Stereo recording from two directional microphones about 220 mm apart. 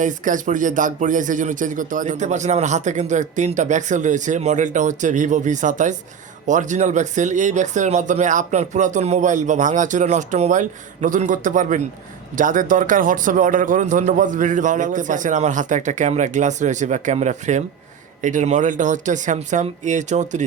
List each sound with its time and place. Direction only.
0.0 s speech: 35° right (ahead or behind)